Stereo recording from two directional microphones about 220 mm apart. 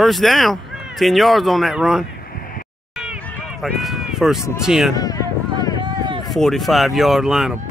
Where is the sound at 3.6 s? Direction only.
Centre (ahead or behind).